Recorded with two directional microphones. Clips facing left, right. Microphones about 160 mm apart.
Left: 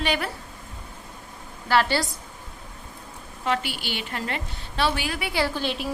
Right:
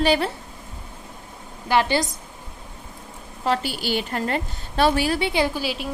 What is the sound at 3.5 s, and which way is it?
A woman's voice, 40° right (ahead or behind).